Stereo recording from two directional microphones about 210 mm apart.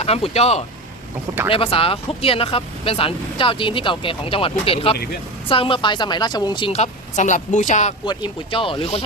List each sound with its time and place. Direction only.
0.0 s speech: 30° left (ahead or behind)
8.0 s speech: 20° left (ahead or behind)